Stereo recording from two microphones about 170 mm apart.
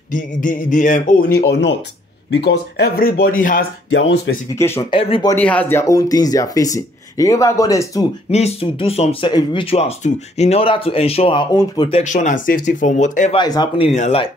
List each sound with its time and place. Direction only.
0.1 s speech: 50° left (ahead or behind)
4.6 s speech: 15° left (ahead or behind)
4.9 s speech: 30° left (ahead or behind)
5.3 s speech: 10° left (ahead or behind)
8.3 s speech: 40° left (ahead or behind)
11.9 s speech: 45° left (ahead or behind)
13.3 s speech: 25° left (ahead or behind)
13.8 s speech: 40° left (ahead or behind)